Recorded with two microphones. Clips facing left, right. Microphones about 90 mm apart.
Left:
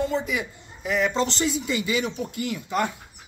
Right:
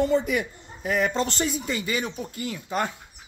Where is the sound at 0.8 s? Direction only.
45° right (ahead or behind).